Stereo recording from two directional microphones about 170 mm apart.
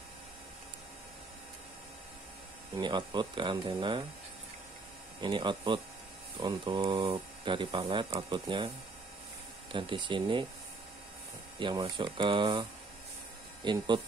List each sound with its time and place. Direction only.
2.8 s speech: 25° right (ahead or behind)
5.2 s speech: 30° right (ahead or behind)
9.7 s speech: 30° right (ahead or behind)
11.6 s speech: 25° right (ahead or behind)
13.7 s speech: 25° right (ahead or behind)